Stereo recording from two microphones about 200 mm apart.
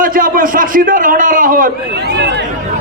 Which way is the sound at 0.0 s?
45° right (ahead or behind).